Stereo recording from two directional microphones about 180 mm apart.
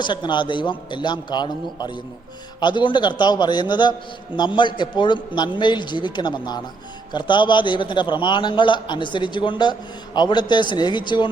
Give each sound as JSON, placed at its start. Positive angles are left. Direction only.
{"t": 0.0, "sound": "a man's voice", "side_deg": 25}